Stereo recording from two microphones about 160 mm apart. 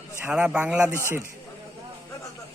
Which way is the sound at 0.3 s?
5° right (ahead or behind).